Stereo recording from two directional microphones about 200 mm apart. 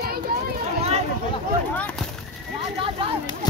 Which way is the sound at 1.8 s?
5° left (ahead or behind).